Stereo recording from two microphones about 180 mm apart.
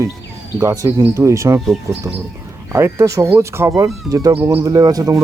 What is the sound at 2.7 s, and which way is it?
Speech, 15° right (ahead or behind).